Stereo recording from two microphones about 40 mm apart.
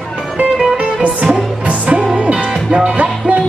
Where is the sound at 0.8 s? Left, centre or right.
Right.